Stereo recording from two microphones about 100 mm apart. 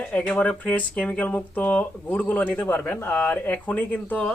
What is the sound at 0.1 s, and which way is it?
Speech, 10° left (ahead or behind).